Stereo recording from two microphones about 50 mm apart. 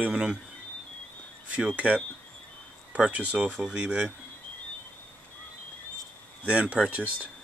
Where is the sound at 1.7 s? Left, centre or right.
Right.